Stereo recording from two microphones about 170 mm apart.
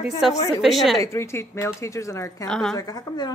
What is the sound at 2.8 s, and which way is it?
Speech, 20° left (ahead or behind).